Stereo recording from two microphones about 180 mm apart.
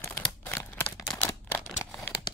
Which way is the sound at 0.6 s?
15° left (ahead or behind).